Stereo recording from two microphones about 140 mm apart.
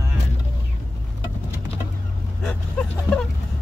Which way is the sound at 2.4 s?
5° left (ahead or behind).